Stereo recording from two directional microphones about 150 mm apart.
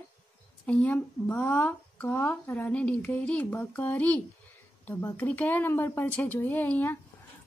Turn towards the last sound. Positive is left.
turn(degrees=10)  # may be behind; listen again after turning